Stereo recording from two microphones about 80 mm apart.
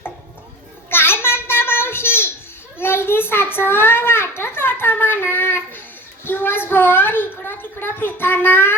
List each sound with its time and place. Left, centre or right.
0.9 s child singing: left
2.7 s a child's voice: left